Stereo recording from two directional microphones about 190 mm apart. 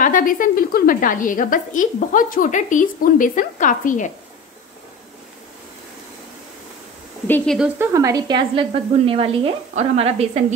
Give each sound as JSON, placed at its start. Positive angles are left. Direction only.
{"t": 0.0, "sound": "a woman's voice", "side_deg": 45}
{"t": 7.2, "sound": "speech", "side_deg": 10}
{"t": 7.5, "sound": "speech", "side_deg": -5}
{"t": 7.9, "sound": "speech", "side_deg": -15}
{"t": 8.5, "sound": "a woman's voice", "side_deg": -30}